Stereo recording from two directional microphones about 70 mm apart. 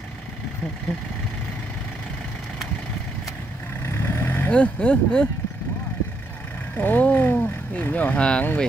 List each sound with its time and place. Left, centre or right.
3.8 s vehicle: left
4.5 s speech: centre
6.8 s speech: left